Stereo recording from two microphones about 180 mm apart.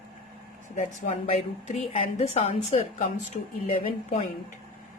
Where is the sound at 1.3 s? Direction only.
35° left (ahead or behind).